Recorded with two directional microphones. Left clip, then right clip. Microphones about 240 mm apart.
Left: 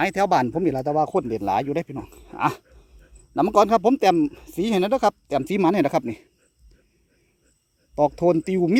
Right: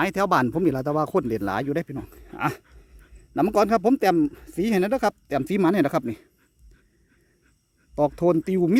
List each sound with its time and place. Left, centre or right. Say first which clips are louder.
0.0 s speech: left 2 dB; centre
7.9 s speech: left 2 dB; centre